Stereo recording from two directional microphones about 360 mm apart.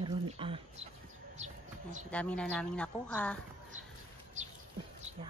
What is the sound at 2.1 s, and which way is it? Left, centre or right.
Speech, centre.